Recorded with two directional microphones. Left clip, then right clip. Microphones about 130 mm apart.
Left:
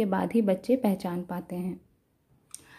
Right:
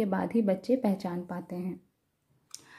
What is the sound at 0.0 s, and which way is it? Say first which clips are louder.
A woman's voice: left 3 dB; 25° left (ahead or behind).